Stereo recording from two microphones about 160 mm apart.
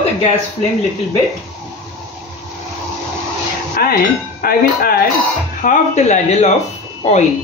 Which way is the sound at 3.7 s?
70° left (ahead or behind).